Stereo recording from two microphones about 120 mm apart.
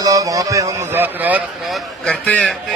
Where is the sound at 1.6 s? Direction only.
Centre (ahead or behind).